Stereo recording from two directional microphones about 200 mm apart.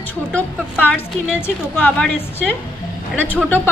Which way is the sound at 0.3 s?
5° left (ahead or behind).